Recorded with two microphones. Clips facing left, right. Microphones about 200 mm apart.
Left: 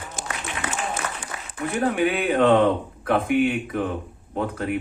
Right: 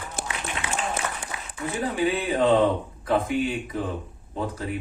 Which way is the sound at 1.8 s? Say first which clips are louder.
Left 3 dB; 60° left (ahead or behind).